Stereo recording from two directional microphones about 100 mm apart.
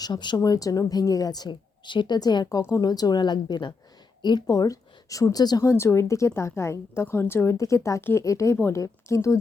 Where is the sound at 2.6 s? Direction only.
30° left (ahead or behind).